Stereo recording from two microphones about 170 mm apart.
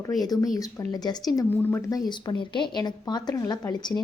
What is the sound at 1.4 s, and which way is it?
Speech, 10° left (ahead or behind).